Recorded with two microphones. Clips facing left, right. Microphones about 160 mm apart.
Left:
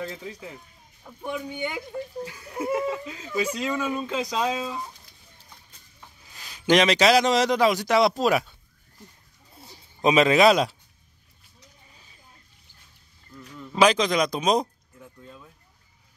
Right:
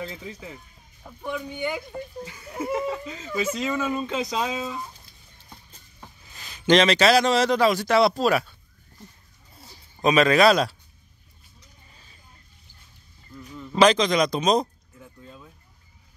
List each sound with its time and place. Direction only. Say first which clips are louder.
0.1 s speech: even; 5° right (ahead or behind)
1.2 s a man's voice: right 1 dB; 15° left (ahead or behind); by 4.6 s 5° right (ahead or behind)
6.3 s a man's voice: right 1 dB; 10° left (ahead or behind)
10.0 s speech: even; 20° left (ahead or behind)
13.6 s speech: right 2 dB; 5° left (ahead or behind)